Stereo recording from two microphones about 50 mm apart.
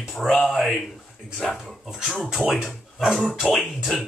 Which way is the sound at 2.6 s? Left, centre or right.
Centre.